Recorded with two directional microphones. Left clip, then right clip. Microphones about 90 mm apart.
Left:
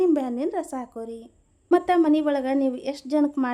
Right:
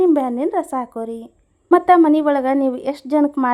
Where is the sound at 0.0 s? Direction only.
35° right (ahead or behind).